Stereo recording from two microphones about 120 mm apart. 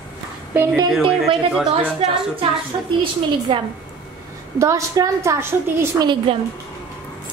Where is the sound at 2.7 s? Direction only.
45° right (ahead or behind).